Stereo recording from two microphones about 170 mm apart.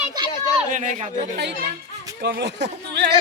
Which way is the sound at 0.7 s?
45° right (ahead or behind).